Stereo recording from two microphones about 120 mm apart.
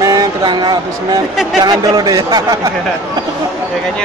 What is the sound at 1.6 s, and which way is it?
Speech, 35° right (ahead or behind).